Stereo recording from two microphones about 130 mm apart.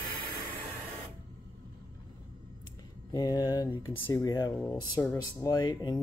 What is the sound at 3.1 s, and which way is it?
Speech, 30° left (ahead or behind).